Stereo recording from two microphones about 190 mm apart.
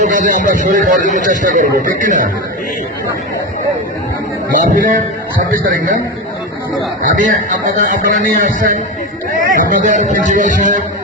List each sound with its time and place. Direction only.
0.0 s speech: 45° right (ahead or behind)
4.5 s speech: 45° right (ahead or behind)
7.0 s speech: 45° right (ahead or behind)